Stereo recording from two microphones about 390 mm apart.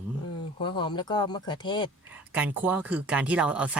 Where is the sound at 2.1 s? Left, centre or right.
Centre.